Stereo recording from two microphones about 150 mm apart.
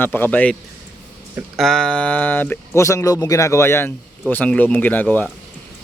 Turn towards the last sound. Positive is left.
turn(degrees=10)  # may be behind; listen again after turning